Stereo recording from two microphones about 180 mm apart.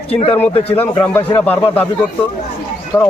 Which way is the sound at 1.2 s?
30° left (ahead or behind).